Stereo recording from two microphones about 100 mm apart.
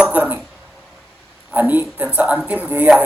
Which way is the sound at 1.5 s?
15° right (ahead or behind).